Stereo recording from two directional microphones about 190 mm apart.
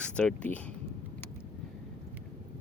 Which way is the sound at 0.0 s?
5° left (ahead or behind).